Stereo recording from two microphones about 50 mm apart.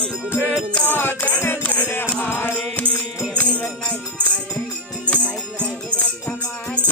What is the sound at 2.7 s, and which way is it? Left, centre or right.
Music, left.